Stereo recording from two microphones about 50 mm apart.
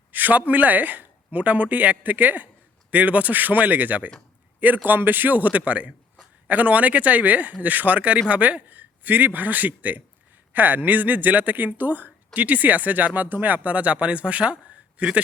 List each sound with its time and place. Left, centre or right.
0.1 s speech: right